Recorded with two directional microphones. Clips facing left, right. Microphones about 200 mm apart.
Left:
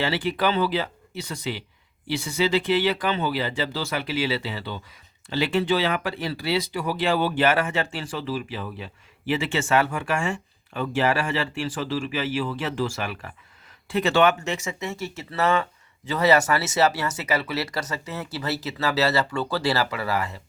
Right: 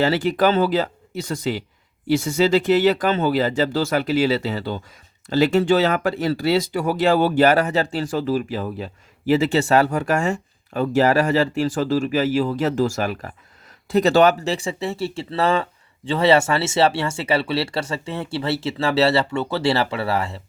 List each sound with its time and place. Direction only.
0.0 s speech: 45° right (ahead or behind)